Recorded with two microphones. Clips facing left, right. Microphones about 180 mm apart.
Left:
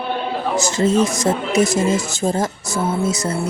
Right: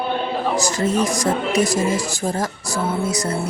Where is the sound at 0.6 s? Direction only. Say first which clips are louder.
Left 6 dB; 25° left (ahead or behind).